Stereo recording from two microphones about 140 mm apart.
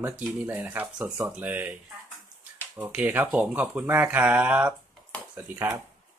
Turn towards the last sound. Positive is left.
turn(degrees=-15)  # may be behind; listen again after turning